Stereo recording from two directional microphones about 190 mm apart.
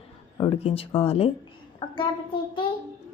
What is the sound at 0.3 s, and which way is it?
A child's voice, 30° left (ahead or behind).